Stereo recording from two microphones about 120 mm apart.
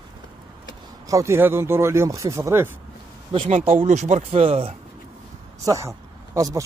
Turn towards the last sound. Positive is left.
turn(degrees=-30)  # may be behind; listen again after turning